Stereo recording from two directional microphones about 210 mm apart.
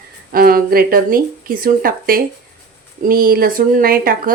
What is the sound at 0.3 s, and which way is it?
A woman's voice, 45° right (ahead or behind).